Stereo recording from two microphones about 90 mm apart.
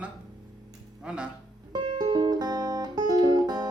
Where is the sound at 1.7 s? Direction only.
60° right (ahead or behind).